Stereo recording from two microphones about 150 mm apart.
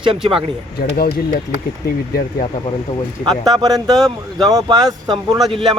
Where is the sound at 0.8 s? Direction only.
90° left.